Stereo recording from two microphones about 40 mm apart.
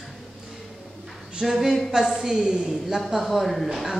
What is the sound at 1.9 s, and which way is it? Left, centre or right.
A woman's voice, centre.